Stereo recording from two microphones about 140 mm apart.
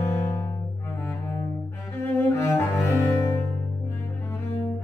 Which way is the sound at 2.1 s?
15° left (ahead or behind).